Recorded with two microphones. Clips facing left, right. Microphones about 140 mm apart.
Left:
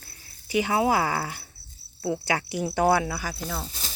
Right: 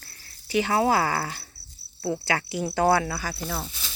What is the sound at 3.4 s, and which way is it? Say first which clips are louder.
Speech: right 1 dB; 5° right (ahead or behind).